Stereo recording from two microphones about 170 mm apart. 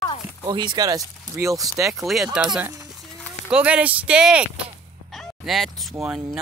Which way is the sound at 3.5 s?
10° right (ahead or behind).